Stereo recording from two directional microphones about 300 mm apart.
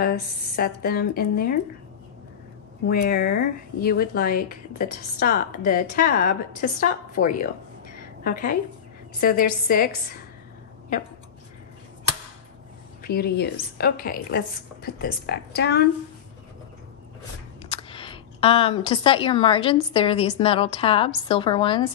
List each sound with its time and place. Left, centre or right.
0.0 s a woman's voice: left
2.9 s a woman's voice: left
13.0 s a woman's voice: left
17.6 s speech: centre